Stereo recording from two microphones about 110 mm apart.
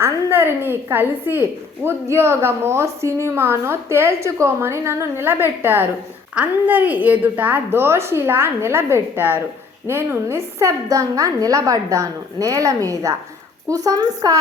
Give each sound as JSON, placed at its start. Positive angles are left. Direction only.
{"t": 0.0, "sound": "a woman's voice", "side_deg": -20}